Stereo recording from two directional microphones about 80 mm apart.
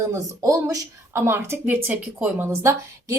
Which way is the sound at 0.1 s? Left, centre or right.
Right.